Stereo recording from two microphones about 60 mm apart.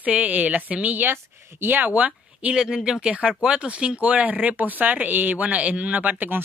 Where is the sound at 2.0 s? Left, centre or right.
Right.